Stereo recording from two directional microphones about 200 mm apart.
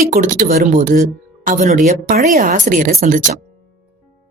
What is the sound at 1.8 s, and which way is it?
A woman's voice, 50° right (ahead or behind).